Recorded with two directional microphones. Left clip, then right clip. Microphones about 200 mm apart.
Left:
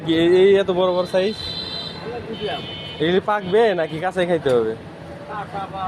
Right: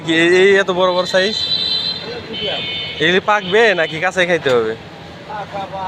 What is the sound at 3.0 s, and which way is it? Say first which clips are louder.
Speech: right 5 dB; 5° left (ahead or behind).